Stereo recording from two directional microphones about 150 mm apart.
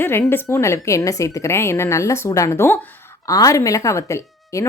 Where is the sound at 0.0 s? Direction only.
15° left (ahead or behind).